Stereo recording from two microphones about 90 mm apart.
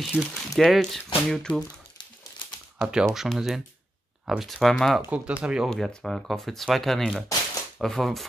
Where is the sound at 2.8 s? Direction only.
10° right (ahead or behind).